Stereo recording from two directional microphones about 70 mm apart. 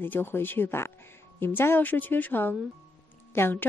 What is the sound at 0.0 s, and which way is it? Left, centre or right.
A woman's voice, left.